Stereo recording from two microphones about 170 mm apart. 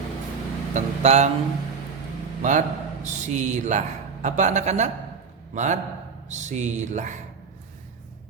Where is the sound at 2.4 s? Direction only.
45° right (ahead or behind).